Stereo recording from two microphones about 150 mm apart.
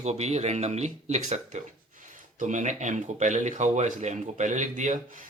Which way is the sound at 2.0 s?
60° right (ahead or behind).